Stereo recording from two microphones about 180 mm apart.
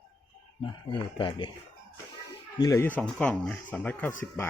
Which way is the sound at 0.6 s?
25° left (ahead or behind).